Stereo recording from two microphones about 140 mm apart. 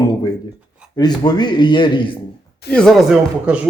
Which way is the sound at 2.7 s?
5° left (ahead or behind).